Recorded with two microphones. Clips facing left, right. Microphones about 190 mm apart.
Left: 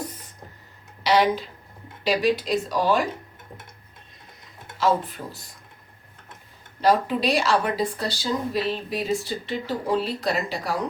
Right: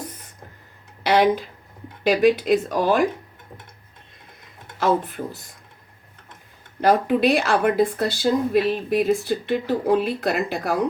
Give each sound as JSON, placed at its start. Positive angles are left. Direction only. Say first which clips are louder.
{"t": 1.0, "sound": "speech", "louder": "right 2 dB", "side_deg": -55}
{"t": 4.8, "sound": "speech", "louder": "right 2 dB", "side_deg": -55}
{"t": 6.8, "sound": "speech", "louder": "right 3 dB", "side_deg": -55}